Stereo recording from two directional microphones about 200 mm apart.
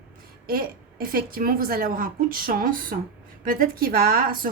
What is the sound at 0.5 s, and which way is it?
A woman's voice, 45° right (ahead or behind).